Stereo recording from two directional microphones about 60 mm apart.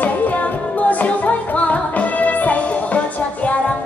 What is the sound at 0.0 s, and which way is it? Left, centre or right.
Music, left.